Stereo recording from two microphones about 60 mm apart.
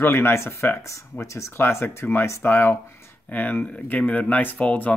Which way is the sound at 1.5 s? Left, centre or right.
Left.